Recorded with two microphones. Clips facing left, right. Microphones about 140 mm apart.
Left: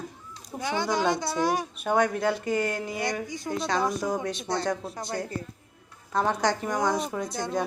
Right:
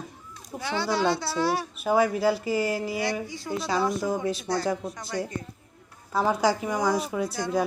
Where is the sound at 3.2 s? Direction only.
20° left (ahead or behind).